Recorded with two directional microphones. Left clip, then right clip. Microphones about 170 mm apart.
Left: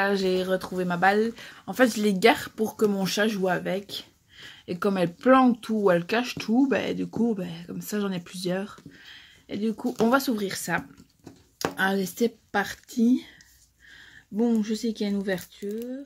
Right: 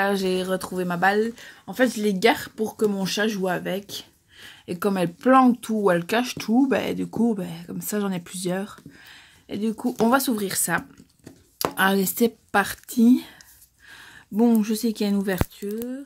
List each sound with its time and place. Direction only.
0.0 s speech: 15° right (ahead or behind)
1.1 s speech: centre (ahead or behind)
1.7 s speech: 10° left (ahead or behind); by 13.3 s 35° right (ahead or behind)
14.3 s speech: 35° right (ahead or behind)